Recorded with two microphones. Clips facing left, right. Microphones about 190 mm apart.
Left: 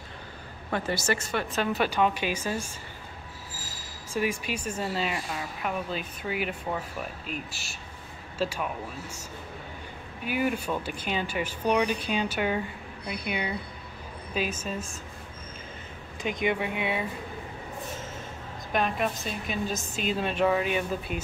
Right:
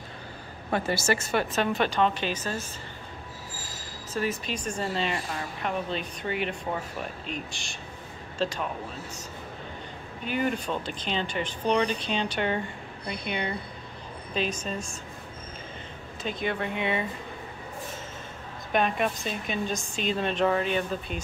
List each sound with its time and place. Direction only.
0.7 s a woman's voice: 30° right (ahead or behind)
1.5 s speech: 5° left (ahead or behind)
4.1 s speech: 10° left (ahead or behind)
10.2 s speech: 10° left (ahead or behind)
16.2 s speech: 15° left (ahead or behind)
18.7 s speech: centre (ahead or behind)